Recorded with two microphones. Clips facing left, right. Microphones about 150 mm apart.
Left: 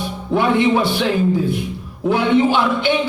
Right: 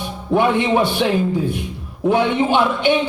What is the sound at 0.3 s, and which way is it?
A man's voice, 15° right (ahead or behind).